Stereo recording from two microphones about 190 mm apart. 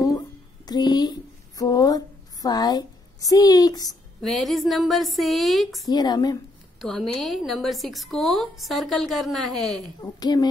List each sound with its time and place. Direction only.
0.7 s speech: 20° left (ahead or behind)
4.2 s a woman's voice: centre (ahead or behind)
5.9 s a woman's voice: 20° left (ahead or behind)
6.8 s a woman's voice: centre (ahead or behind)
10.2 s a woman's voice: 20° left (ahead or behind)